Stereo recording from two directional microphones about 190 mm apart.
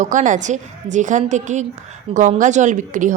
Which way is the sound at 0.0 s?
40° right (ahead or behind).